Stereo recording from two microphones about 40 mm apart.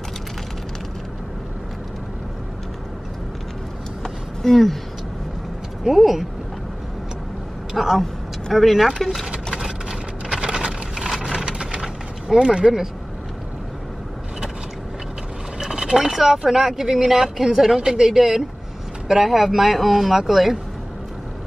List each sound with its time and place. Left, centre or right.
4.0 s a sound: centre
5.9 s speech: centre
7.7 s speech: centre
8.0 s speech: centre
10.3 s a sound: right
15.6 s speech: centre